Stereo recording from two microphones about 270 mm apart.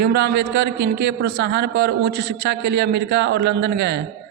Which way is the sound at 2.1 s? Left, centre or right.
Right.